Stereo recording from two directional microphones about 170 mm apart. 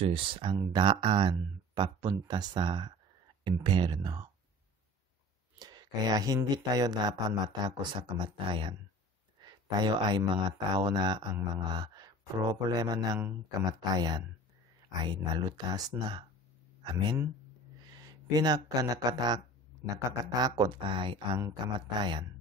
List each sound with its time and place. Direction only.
0.0 s speech: 30° right (ahead or behind)
5.6 s speech: 25° right (ahead or behind)